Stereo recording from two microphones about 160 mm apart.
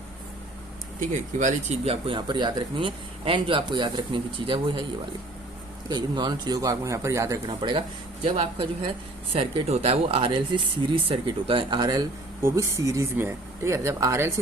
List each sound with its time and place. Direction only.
1.4 s speech: 45° right (ahead or behind)
5.9 s speech: 25° right (ahead or behind)